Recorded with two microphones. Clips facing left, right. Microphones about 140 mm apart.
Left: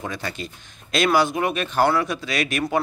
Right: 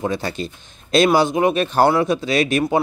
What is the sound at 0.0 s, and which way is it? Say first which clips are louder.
A man's voice: right 7 dB; 30° right (ahead or behind).